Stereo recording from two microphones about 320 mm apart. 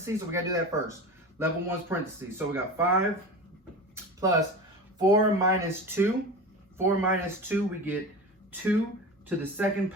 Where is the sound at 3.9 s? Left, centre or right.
Centre.